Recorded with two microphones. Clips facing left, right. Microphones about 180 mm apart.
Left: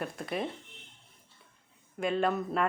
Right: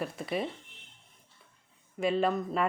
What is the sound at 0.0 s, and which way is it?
Speech, centre (ahead or behind).